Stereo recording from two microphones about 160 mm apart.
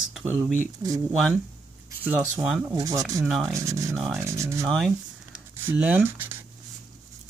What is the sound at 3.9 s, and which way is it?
Speech, centre (ahead or behind).